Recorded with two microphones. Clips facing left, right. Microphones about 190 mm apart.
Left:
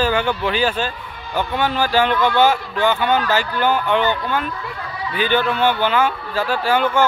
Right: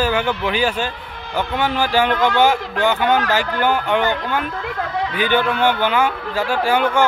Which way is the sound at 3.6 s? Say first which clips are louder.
Left 1 dB; 10° right (ahead or behind).